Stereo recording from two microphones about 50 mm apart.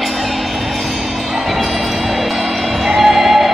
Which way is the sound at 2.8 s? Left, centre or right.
Centre.